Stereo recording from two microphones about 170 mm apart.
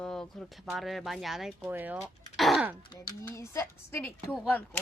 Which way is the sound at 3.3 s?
15° left (ahead or behind).